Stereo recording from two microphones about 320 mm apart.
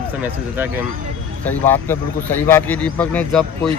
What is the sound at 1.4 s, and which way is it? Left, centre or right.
Speech, centre.